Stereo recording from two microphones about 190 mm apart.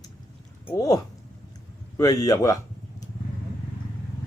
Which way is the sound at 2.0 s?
20° left (ahead or behind).